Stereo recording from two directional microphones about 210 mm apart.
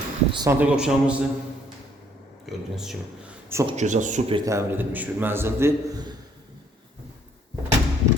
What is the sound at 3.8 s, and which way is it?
Speech, 35° right (ahead or behind).